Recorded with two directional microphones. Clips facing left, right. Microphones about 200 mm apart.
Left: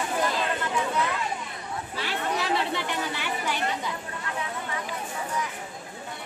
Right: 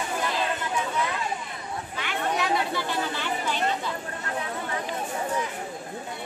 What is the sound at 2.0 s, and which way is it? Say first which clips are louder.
Chatter: right 1 dB; 30° left (ahead or behind).